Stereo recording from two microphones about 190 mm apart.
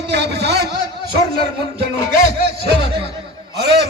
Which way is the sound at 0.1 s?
60° right (ahead or behind).